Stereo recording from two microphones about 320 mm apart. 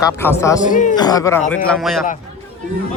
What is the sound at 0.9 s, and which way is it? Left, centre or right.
A man's voice, centre.